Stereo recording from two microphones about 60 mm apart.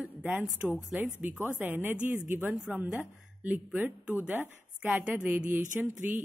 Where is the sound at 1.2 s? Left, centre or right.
Right.